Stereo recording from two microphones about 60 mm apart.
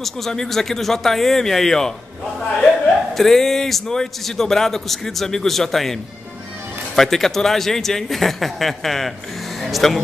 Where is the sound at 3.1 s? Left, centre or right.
Centre.